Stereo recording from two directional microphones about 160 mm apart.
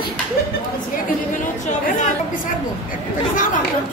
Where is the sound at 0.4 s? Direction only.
75° left (ahead or behind).